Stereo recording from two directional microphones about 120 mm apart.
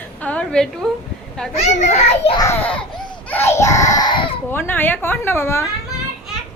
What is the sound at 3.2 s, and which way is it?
A woman's voice, 15° left (ahead or behind).